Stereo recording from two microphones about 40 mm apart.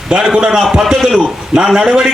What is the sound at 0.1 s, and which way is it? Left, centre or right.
A man's voice, centre.